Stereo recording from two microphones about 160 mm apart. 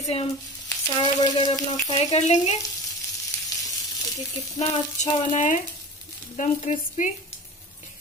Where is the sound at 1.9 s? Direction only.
45° left (ahead or behind).